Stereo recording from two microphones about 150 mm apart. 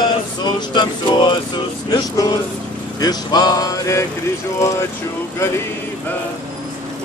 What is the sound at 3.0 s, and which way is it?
Speech, 25° left (ahead or behind).